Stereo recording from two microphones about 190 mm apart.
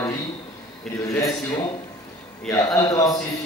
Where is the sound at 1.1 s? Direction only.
10° left (ahead or behind).